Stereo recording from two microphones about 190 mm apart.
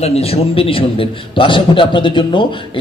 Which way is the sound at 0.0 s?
35° left (ahead or behind).